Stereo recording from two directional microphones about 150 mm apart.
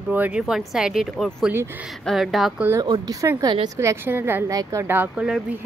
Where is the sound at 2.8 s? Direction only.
25° right (ahead or behind).